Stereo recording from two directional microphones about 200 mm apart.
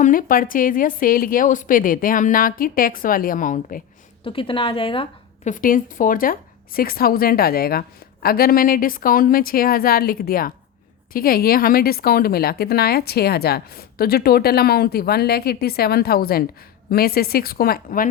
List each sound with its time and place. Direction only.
0.0 s a woman's voice: 45° left (ahead or behind)
4.2 s a woman's voice: 25° left (ahead or behind)
5.5 s a woman's voice: 45° left (ahead or behind)